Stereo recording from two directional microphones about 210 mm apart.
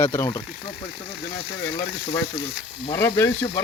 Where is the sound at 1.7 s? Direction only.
25° left (ahead or behind).